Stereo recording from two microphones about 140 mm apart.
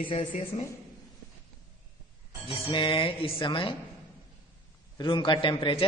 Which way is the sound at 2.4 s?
35° left (ahead or behind).